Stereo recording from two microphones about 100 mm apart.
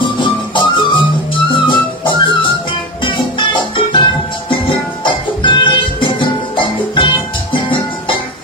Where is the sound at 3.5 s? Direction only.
50° left (ahead or behind).